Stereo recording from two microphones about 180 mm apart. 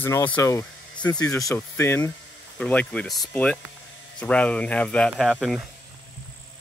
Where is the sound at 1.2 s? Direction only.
20° left (ahead or behind); by 5.6 s centre (ahead or behind).